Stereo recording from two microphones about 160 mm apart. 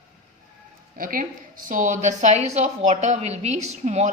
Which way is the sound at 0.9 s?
60° right (ahead or behind).